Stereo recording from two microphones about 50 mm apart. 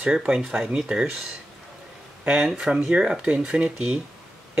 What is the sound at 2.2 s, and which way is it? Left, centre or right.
Speech, centre.